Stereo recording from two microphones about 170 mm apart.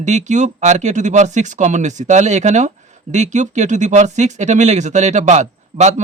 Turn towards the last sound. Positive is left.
turn(degrees=-45)  # may be behind; listen again after turning